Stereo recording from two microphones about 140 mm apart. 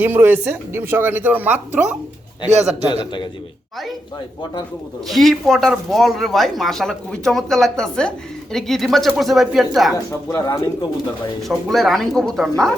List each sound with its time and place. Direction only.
0.0 s speech: 15° right (ahead or behind)
5.0 s speech: centre (ahead or behind)
9.9 s speech: 25° left (ahead or behind)
11.4 s speech: centre (ahead or behind)